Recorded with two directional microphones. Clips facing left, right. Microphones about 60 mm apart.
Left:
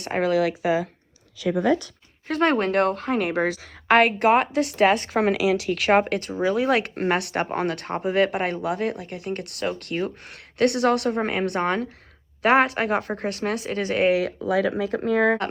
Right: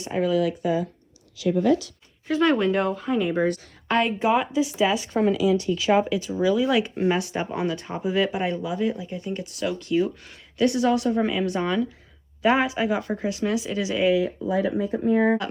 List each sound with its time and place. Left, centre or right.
0.0 s speech: left
2.2 s speech: left